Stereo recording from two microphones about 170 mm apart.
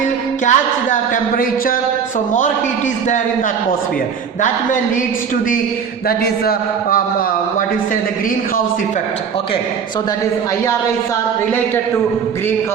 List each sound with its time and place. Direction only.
0.4 s speech: 50° left (ahead or behind)
6.1 s a man's voice: 65° left (ahead or behind)